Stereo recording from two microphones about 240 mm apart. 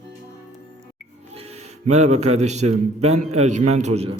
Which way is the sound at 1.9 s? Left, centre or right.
Right.